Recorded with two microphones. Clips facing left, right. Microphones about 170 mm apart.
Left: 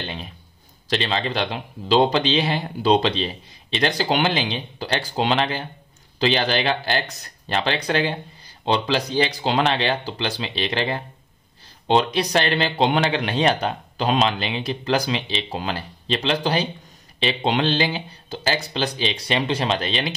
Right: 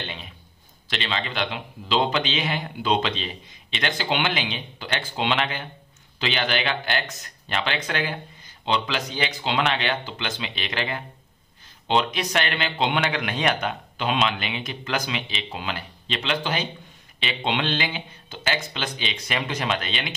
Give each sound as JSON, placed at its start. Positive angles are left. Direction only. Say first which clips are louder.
{"t": 0.8, "sound": "speech", "louder": "left 6 dB", "side_deg": 40}